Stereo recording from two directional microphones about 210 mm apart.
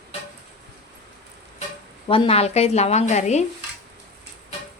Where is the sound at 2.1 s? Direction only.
25° left (ahead or behind).